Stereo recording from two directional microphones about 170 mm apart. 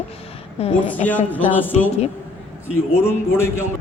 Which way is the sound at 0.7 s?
10° left (ahead or behind).